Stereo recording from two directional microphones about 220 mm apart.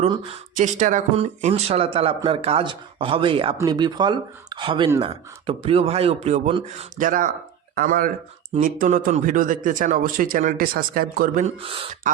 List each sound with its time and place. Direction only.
0.5 s speech: 35° right (ahead or behind)
6.9 s speech: 35° right (ahead or behind)
11.5 s speech: 25° right (ahead or behind)